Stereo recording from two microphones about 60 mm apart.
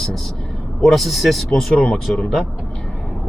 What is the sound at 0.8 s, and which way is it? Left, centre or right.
Speech, centre.